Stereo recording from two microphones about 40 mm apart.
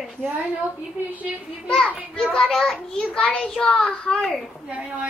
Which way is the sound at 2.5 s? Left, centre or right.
Centre.